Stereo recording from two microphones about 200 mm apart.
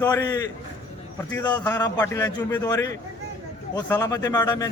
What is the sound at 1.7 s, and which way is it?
A man's voice, 20° left (ahead or behind).